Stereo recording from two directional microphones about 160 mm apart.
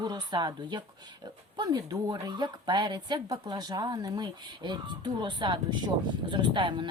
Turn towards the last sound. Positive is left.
turn(degrees=-30)  # may be behind; listen again after turning